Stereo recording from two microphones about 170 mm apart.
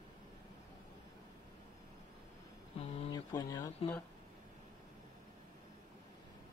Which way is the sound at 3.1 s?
20° left (ahead or behind).